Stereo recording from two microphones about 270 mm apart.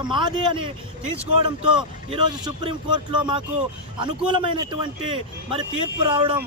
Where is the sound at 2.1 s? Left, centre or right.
Centre.